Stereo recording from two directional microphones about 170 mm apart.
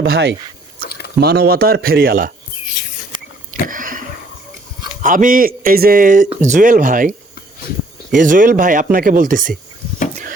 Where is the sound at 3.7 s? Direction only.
50° right (ahead or behind).